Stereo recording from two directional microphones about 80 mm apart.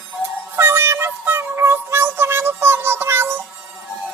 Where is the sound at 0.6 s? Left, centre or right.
Right.